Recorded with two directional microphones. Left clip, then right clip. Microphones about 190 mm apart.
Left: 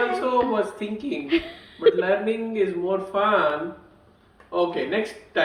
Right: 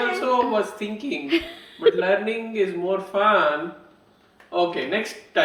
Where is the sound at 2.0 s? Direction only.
30° right (ahead or behind).